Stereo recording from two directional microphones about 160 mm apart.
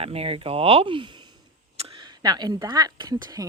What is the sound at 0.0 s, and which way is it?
Speech, 40° right (ahead or behind).